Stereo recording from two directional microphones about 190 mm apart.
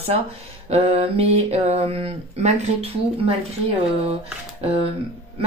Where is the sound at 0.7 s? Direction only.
35° right (ahead or behind).